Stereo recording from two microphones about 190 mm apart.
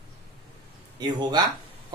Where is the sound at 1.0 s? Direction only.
20° right (ahead or behind).